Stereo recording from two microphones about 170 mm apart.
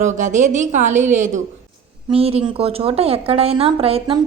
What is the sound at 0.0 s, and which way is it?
A woman's voice, 45° right (ahead or behind).